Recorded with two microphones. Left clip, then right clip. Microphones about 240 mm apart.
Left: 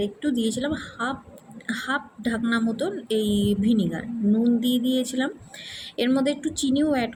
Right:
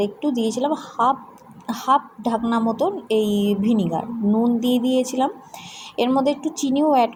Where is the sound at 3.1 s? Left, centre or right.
Right.